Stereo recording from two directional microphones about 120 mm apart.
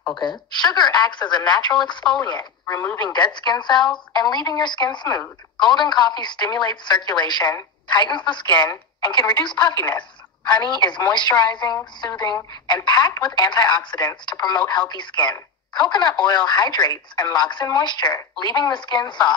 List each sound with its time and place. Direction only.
0.1 s speech: 40° left (ahead or behind)
2.6 s speech: 20° left (ahead or behind)
3.0 s speech: 40° left (ahead or behind)
8.6 s speech: 25° left (ahead or behind)
9.4 s a woman's voice: 40° left (ahead or behind)